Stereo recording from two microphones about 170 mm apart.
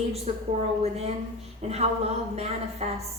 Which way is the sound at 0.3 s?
40° right (ahead or behind).